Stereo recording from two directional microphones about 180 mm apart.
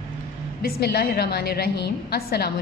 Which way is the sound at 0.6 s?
60° left (ahead or behind).